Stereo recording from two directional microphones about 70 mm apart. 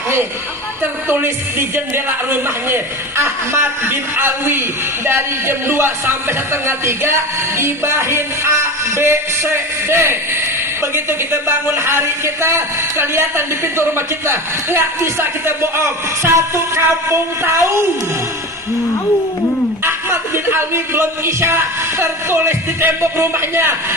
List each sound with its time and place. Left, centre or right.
0.8 s a man's voice: right
19.8 s a man's voice: right